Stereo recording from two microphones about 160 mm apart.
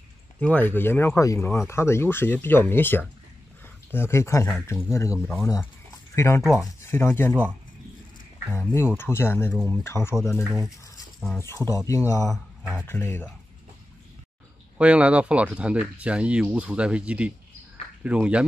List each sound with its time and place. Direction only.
0.4 s speech: 10° left (ahead or behind)
5.1 s speech: centre (ahead or behind)
5.4 s speech: 15° left (ahead or behind)
6.4 s speech: centre (ahead or behind)
6.8 s speech: 15° left (ahead or behind)
8.9 s speech: 15° left (ahead or behind)
10.4 s speech: 5° right (ahead or behind)
11.3 s speech: 15° left (ahead or behind)
14.8 s speech: 10° right (ahead or behind)